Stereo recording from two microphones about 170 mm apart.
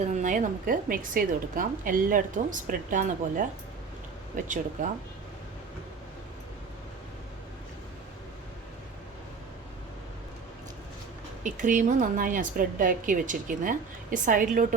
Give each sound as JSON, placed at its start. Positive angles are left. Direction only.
{"t": 0.2, "sound": "a woman's voice", "side_deg": -50}
{"t": 11.4, "sound": "a woman's voice", "side_deg": -50}